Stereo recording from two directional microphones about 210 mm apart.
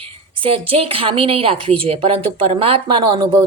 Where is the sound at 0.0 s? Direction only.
25° right (ahead or behind).